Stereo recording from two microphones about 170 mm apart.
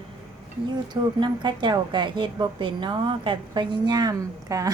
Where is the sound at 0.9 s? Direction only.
25° right (ahead or behind).